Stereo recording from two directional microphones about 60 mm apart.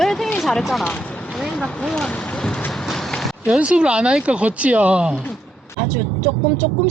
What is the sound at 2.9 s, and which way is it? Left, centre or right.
Clip-clop, centre.